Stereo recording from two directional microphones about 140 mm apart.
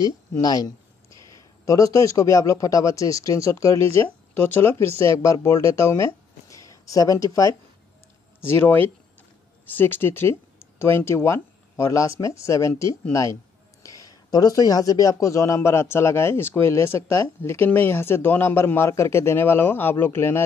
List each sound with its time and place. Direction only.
0.3 s speech: 25° left (ahead or behind)